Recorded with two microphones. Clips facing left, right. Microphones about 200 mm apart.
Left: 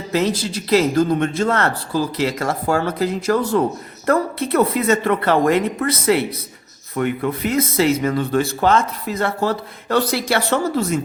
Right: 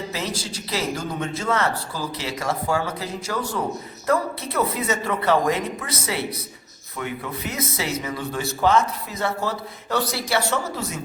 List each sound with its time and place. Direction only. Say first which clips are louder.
0.1 s speech: left 10 dB; 60° left (ahead or behind)